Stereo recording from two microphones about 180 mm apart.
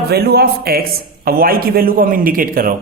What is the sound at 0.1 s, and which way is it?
A man's voice, 65° right (ahead or behind).